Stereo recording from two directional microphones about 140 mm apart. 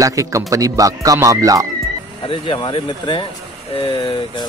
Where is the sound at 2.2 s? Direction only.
35° left (ahead or behind).